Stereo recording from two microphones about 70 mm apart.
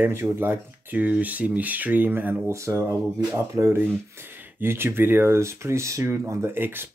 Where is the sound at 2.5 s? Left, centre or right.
Right.